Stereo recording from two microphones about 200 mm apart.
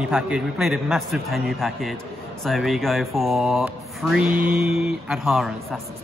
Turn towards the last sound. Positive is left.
turn(degrees=0)  # may be behind; listen again after turning